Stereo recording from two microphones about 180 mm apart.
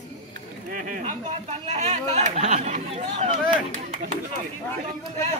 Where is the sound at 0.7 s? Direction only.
45° right (ahead or behind).